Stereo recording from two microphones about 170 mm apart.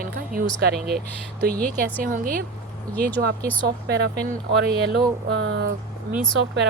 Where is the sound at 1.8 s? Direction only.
55° right (ahead or behind).